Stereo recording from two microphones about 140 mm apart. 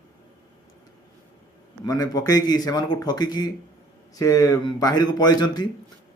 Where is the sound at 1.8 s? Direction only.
25° left (ahead or behind).